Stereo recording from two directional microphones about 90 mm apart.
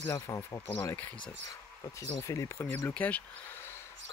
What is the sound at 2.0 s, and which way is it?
Speech, 35° left (ahead or behind).